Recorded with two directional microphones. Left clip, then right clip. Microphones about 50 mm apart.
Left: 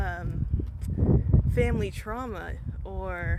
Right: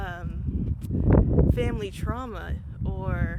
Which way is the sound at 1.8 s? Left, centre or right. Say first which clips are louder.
Even; centre.